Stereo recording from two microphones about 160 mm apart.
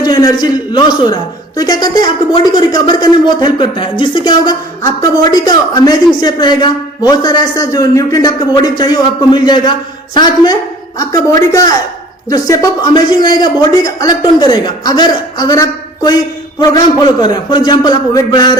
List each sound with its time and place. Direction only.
0.0 s a man's voice: 25° left (ahead or behind)